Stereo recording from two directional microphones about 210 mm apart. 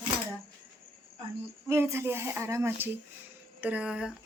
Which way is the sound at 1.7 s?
10° right (ahead or behind).